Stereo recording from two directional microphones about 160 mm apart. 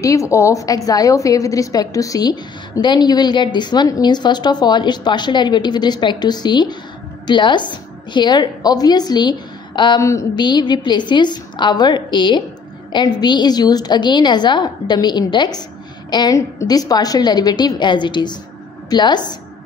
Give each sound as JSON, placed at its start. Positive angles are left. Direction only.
{"t": 0.0, "sound": "a woman's voice", "side_deg": 20}